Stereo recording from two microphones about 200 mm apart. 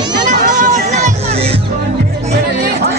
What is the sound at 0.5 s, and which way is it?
Music, 35° right (ahead or behind).